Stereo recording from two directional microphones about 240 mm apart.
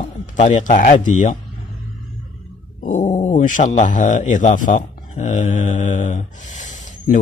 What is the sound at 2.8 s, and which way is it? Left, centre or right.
Speech, left.